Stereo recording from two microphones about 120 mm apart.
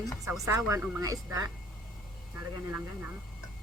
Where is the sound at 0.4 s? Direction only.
25° right (ahead or behind).